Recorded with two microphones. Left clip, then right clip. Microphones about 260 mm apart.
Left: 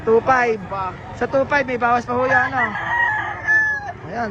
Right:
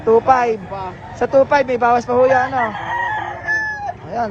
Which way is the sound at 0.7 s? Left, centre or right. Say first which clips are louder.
Left 2 dB; right.